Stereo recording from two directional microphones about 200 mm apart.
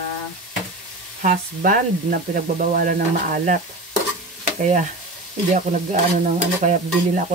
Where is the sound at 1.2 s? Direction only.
45° right (ahead or behind).